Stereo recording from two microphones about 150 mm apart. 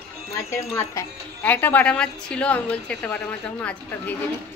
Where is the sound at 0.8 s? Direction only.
15° left (ahead or behind).